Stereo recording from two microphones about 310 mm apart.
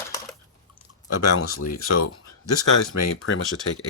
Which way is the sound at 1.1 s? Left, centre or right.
Left.